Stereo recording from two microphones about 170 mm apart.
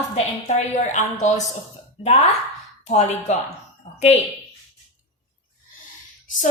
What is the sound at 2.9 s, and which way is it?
Speech, 40° left (ahead or behind).